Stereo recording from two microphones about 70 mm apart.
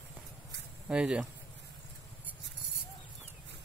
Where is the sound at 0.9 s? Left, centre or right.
Centre.